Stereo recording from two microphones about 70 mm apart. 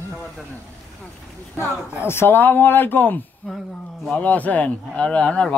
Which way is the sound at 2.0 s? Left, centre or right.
Left.